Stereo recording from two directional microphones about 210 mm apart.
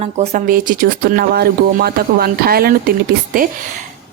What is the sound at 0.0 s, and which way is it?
Speech, 35° right (ahead or behind).